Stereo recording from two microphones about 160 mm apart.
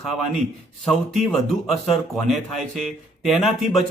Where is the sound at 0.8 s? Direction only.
5° left (ahead or behind).